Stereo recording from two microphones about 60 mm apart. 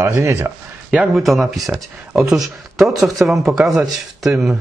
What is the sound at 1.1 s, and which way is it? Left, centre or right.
Speech, centre.